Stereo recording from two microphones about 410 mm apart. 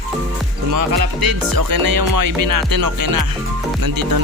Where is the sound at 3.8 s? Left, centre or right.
Right.